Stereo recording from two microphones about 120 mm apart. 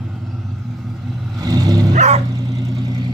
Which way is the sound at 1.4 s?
30° right (ahead or behind).